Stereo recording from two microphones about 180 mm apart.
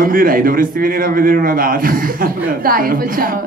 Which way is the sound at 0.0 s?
50° right (ahead or behind).